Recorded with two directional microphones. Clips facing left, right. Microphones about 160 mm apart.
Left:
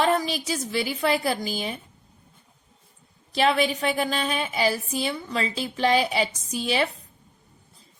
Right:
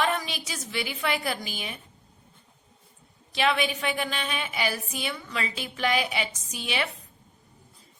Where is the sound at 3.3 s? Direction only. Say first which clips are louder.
Left 4 dB; 35° left (ahead or behind).